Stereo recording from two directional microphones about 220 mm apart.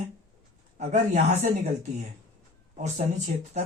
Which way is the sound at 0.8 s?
30° right (ahead or behind).